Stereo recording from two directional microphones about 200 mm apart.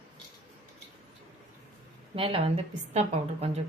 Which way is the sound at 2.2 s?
30° right (ahead or behind).